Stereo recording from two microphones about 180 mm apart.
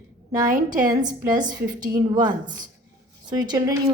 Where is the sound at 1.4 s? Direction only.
55° right (ahead or behind).